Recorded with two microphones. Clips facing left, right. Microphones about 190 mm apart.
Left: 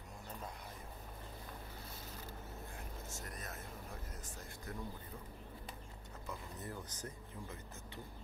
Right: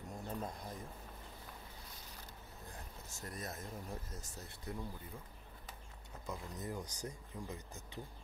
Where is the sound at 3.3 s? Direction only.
35° right (ahead or behind).